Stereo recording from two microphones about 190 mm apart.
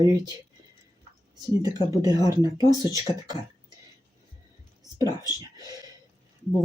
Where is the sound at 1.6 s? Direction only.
20° right (ahead or behind).